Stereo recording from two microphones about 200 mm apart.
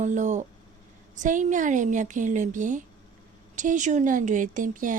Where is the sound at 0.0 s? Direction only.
35° right (ahead or behind).